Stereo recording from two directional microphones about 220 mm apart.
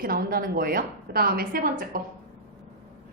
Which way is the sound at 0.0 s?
40° right (ahead or behind).